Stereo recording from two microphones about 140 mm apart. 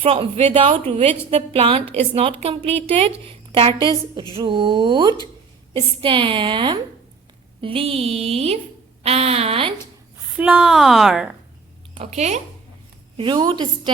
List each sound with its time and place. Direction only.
0.0 s a woman's voice: 40° right (ahead or behind)
10.3 s a woman's voice: 10° right (ahead or behind)
11.9 s a woman's voice: 55° right (ahead or behind)
13.1 s a woman's voice: 35° right (ahead or behind)